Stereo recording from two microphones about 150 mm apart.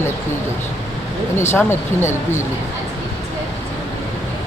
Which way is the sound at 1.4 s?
15° left (ahead or behind).